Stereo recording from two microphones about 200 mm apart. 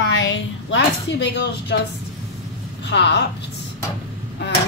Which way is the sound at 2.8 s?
60° left (ahead or behind).